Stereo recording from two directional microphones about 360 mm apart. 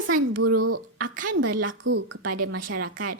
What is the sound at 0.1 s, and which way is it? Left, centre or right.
A child's voice, right.